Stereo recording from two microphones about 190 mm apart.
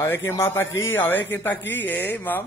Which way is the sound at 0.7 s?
90° left.